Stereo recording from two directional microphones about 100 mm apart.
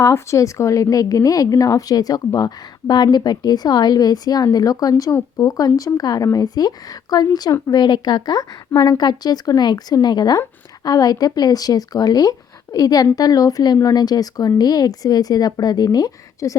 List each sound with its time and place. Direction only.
0.0 s a woman's voice: 30° left (ahead or behind)